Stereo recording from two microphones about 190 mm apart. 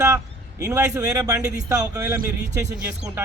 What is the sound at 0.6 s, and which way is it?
A man's voice, 15° right (ahead or behind).